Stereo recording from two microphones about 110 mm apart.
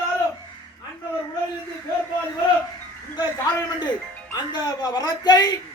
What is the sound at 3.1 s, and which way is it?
Speech, 40° left (ahead or behind).